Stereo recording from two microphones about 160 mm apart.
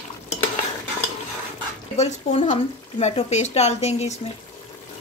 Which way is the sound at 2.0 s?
45° left (ahead or behind).